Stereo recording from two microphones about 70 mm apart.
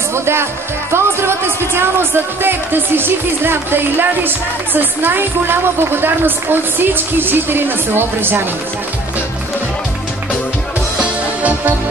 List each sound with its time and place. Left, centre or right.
0.1 s a woman's voice: right
11.0 s music: right